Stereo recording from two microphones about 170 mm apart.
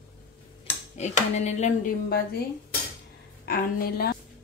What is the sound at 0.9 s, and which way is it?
Speech, 40° left (ahead or behind).